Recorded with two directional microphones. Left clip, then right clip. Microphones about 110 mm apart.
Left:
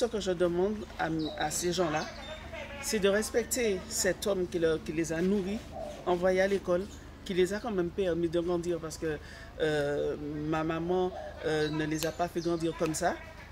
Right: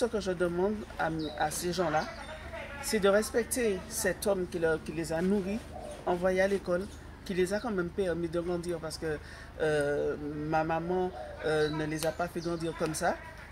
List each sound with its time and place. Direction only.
0.0 s speech: 20° left (ahead or behind)
9.9 s speech: 20° left (ahead or behind)